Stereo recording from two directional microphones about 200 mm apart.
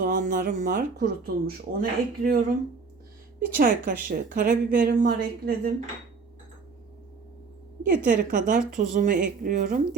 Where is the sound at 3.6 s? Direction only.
45° right (ahead or behind).